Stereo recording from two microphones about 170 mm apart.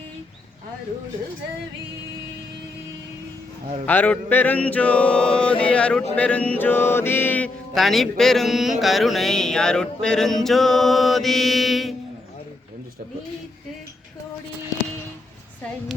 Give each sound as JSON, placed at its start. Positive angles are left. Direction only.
{"t": 3.8, "sound": "mantra", "side_deg": 10}